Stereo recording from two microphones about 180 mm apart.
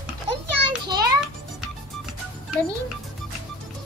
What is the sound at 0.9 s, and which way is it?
Speech, 20° right (ahead or behind).